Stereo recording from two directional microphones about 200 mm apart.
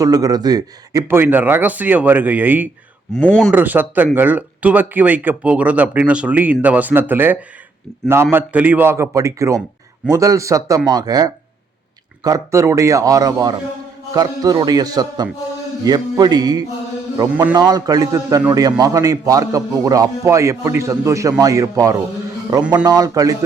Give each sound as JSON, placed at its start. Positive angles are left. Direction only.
{"t": 0.0, "sound": "a man's voice", "side_deg": -20}
{"t": 3.2, "sound": "speech", "side_deg": 5}
{"t": 3.5, "sound": "a man's voice", "side_deg": -10}